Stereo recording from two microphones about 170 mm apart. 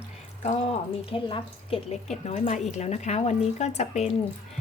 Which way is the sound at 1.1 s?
35° left (ahead or behind).